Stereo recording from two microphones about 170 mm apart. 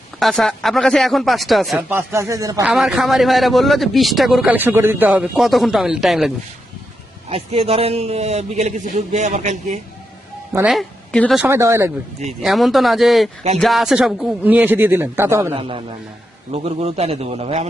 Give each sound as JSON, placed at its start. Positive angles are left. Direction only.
{"t": 0.2, "sound": "a man's voice", "side_deg": 0}
{"t": 1.9, "sound": "speech", "side_deg": -15}
{"t": 2.6, "sound": "a man's voice", "side_deg": 0}
{"t": 7.3, "sound": "a man's voice", "side_deg": -35}
{"t": 10.7, "sound": "a woman's voice", "side_deg": 5}
{"t": 11.4, "sound": "speech", "side_deg": -15}
{"t": 12.4, "sound": "a man's voice", "side_deg": 0}
{"t": 15.5, "sound": "a man's voice", "side_deg": -30}